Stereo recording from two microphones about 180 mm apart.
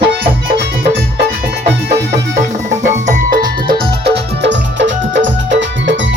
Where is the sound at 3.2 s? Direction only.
60° right (ahead or behind).